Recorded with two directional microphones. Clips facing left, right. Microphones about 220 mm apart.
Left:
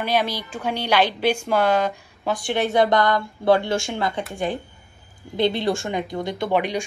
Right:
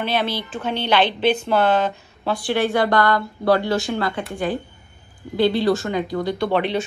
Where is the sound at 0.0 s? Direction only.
10° left (ahead or behind).